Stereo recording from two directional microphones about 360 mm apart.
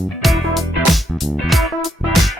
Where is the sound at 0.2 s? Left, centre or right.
Centre.